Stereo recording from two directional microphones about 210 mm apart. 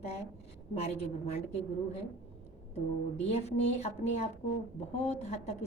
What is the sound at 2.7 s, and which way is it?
A woman's voice, 30° left (ahead or behind).